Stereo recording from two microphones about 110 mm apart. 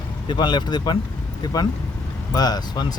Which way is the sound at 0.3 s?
45° left (ahead or behind).